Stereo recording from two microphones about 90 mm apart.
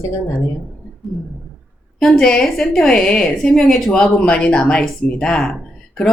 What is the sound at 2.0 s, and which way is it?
A woman's voice, 5° left (ahead or behind).